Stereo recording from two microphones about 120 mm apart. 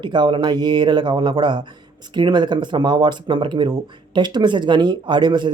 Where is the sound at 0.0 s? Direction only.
40° right (ahead or behind).